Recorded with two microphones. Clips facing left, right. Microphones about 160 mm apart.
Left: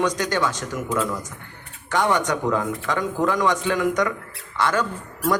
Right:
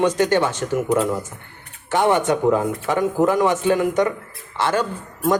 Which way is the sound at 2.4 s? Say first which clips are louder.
Right 5 dB; 20° right (ahead or behind).